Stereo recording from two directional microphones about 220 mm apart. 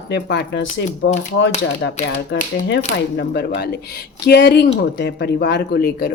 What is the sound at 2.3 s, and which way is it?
Speech, 50° left (ahead or behind).